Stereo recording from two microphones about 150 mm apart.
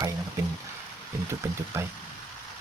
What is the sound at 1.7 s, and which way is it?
Speech, 20° right (ahead or behind).